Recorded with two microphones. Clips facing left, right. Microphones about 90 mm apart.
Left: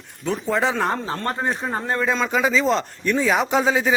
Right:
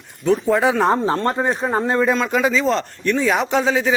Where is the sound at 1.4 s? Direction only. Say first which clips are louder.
Right 5 dB; 10° right (ahead or behind).